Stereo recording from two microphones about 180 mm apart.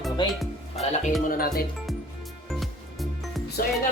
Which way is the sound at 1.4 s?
55° left (ahead or behind).